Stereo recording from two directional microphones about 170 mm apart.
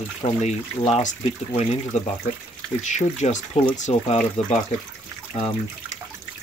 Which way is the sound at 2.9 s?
45° left (ahead or behind).